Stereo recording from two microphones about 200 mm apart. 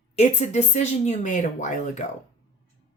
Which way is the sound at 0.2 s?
35° left (ahead or behind).